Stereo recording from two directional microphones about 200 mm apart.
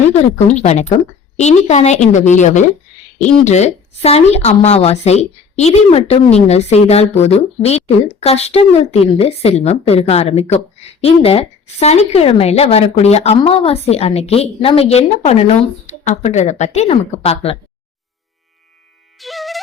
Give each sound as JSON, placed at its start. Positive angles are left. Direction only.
{"t": 0.5, "sound": "a woman's voice", "side_deg": 35}
{"t": 19.2, "sound": "music", "side_deg": 0}